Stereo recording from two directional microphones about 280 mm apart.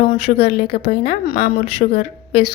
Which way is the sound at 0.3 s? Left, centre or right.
Left.